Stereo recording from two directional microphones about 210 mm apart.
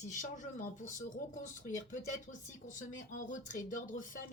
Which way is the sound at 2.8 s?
35° left (ahead or behind).